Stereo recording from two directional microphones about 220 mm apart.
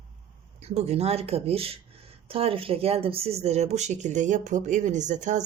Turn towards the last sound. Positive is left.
turn(degrees=-35)  # may be behind; listen again after turning